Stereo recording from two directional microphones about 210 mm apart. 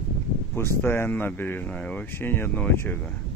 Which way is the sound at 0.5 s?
10° left (ahead or behind).